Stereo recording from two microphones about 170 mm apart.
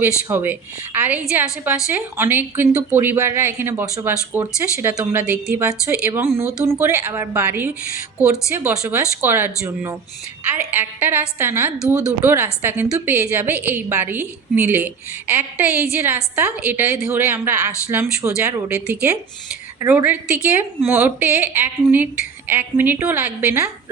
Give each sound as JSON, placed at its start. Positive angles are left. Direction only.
{"t": 0.3, "sound": "a woman's voice", "side_deg": -15}
{"t": 18.9, "sound": "a woman's voice", "side_deg": -5}